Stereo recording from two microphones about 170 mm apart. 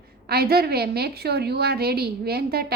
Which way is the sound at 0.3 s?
65° right (ahead or behind).